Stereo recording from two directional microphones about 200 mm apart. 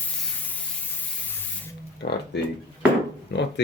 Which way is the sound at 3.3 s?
60° left (ahead or behind).